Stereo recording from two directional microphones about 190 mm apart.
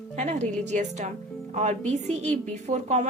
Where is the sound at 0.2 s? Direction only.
35° right (ahead or behind).